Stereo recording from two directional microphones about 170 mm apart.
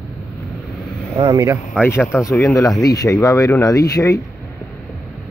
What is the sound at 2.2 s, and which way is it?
Speech, 20° left (ahead or behind).